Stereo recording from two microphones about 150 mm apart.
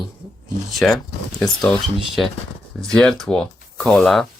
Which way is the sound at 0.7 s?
Centre (ahead or behind).